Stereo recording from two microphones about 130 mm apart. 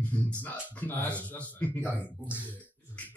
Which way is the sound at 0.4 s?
15° left (ahead or behind).